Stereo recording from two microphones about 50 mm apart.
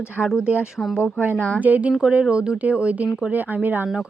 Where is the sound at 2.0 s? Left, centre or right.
Right.